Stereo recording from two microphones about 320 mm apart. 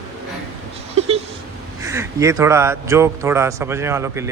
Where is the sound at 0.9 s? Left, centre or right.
Centre.